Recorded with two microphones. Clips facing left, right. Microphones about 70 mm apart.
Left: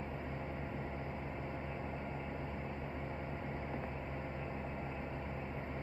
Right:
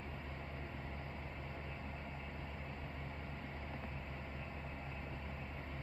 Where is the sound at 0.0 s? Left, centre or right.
Centre.